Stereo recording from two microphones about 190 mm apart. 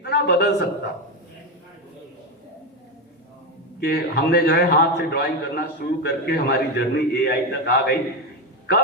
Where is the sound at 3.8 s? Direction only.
60° left (ahead or behind).